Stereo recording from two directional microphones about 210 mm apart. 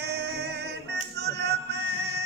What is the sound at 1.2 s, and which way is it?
Music, 50° right (ahead or behind).